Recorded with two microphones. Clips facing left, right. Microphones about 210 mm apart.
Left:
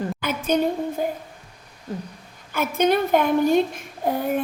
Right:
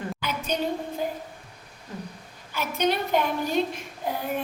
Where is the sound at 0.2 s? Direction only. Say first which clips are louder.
Left 8 dB; 50° left (ahead or behind).